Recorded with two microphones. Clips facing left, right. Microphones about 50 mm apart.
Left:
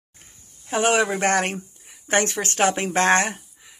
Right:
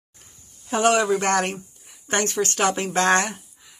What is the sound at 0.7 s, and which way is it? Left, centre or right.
Speech, left.